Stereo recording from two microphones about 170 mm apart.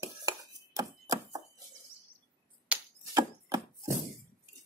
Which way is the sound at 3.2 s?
20° right (ahead or behind).